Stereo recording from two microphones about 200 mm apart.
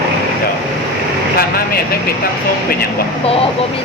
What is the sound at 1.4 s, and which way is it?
Speech, 50° left (ahead or behind).